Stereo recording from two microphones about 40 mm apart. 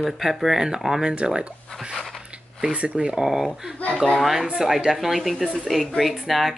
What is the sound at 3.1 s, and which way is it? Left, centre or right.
Speech, centre.